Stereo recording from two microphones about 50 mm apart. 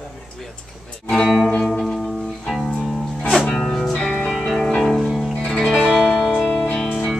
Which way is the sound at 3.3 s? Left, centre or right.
Centre.